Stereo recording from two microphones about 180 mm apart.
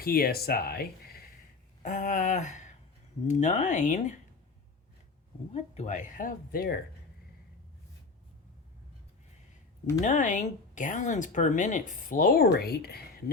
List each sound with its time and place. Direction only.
0.0 s speech: 55° left (ahead or behind)
1.8 s speech: 45° left (ahead or behind)
5.5 s speech: 40° left (ahead or behind); by 6.7 s 55° left (ahead or behind)
10.0 s speech: 45° left (ahead or behind); by 13.3 s 60° left (ahead or behind)